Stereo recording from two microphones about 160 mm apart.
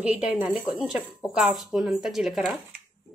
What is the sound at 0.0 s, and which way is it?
A woman's voice, 10° right (ahead or behind).